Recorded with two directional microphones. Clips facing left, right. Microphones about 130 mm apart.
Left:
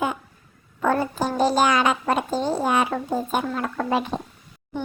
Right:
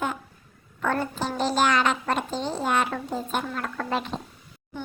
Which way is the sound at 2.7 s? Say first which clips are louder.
Left 3 dB; 10° left (ahead or behind).